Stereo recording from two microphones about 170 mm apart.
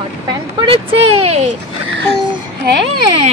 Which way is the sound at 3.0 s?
30° right (ahead or behind).